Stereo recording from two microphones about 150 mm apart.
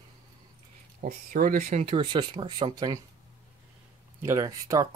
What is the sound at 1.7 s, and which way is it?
Speech, 40° right (ahead or behind).